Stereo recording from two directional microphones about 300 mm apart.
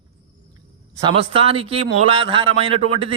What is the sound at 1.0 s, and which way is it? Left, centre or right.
A man's voice, centre.